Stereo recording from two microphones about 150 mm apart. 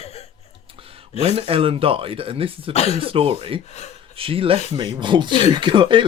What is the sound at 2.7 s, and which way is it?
Speech, 45° left (ahead or behind).